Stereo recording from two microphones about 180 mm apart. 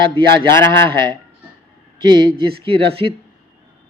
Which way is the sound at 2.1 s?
30° right (ahead or behind).